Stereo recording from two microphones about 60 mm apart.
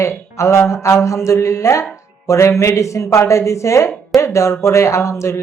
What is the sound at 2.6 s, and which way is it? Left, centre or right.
Speech, left.